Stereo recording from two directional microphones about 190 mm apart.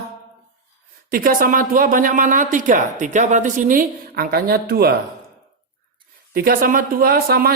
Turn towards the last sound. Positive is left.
turn(degrees=-50)  # may be behind; listen again after turning